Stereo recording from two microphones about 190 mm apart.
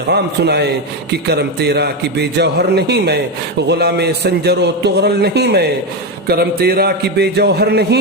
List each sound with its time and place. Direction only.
0.1 s a man's voice: 60° right (ahead or behind)